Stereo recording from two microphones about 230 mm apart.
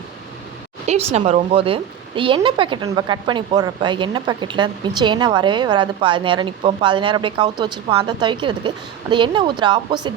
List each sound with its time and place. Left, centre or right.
0.9 s speech: right